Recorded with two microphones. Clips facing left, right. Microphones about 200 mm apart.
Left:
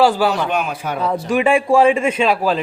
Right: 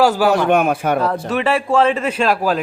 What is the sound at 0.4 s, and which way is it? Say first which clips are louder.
Speech: right 6 dB; 55° right (ahead or behind).